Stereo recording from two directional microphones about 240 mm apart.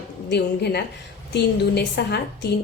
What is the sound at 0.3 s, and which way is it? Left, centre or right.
Speech, left.